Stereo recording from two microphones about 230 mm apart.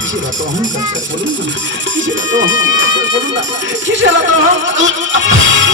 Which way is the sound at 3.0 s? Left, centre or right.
Right.